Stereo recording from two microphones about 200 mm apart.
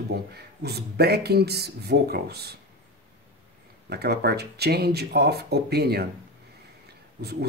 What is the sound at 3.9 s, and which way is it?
Speech, 55° right (ahead or behind).